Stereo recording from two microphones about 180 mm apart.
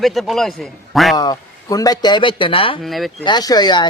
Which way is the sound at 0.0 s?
Centre (ahead or behind).